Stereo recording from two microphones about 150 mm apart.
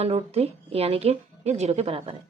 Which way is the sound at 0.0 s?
45° right (ahead or behind).